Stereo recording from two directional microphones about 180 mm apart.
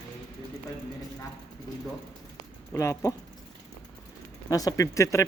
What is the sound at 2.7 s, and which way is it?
Speech, 15° left (ahead or behind).